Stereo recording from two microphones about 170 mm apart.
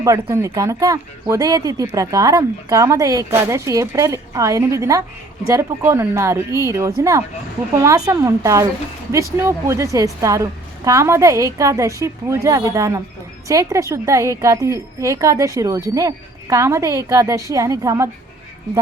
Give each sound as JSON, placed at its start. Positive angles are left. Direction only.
{"t": 0.0, "sound": "speech", "side_deg": -20}